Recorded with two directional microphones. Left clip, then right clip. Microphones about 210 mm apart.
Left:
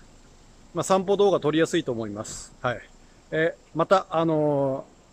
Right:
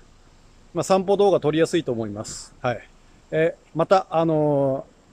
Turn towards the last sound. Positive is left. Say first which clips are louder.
# right 3 dB
turn(degrees=-5)  # may be behind; listen again after turning